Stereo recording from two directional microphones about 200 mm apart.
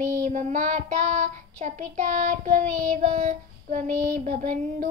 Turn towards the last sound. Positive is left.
turn(degrees=-40)  # may be behind; listen again after turning